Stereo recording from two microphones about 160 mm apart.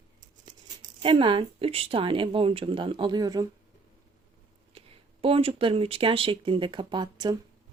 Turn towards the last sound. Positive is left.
turn(degrees=-25)  # may be behind; listen again after turning